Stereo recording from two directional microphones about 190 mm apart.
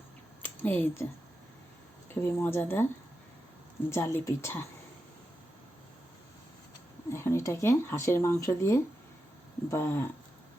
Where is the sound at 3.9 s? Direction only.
15° left (ahead or behind).